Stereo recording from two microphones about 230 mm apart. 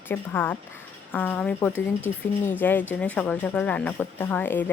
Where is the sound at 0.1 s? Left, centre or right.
Centre.